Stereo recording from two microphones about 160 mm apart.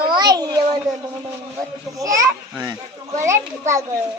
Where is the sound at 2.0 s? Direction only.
20° right (ahead or behind).